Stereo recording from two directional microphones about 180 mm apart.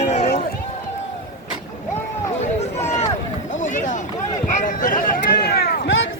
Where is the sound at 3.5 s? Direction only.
45° left (ahead or behind); by 5.9 s 60° left (ahead or behind).